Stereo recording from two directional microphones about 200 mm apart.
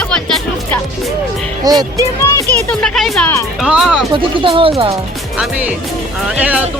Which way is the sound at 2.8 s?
5° left (ahead or behind).